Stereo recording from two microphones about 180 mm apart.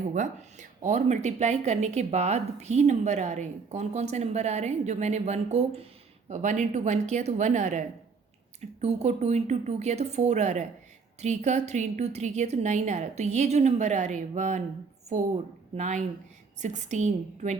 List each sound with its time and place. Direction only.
0.1 s speech: 45° right (ahead or behind)
15.7 s speech: 40° right (ahead or behind)